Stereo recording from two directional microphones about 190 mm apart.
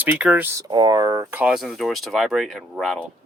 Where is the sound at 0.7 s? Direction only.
20° right (ahead or behind).